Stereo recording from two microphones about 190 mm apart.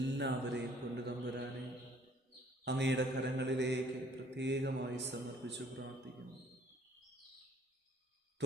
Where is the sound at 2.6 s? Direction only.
65° right (ahead or behind).